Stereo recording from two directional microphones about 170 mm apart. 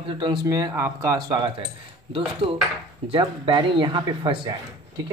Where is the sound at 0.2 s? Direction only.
30° right (ahead or behind).